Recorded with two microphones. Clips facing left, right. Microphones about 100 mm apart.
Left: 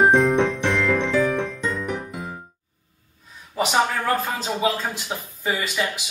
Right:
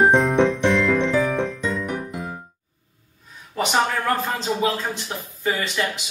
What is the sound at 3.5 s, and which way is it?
Speech, 5° left (ahead or behind).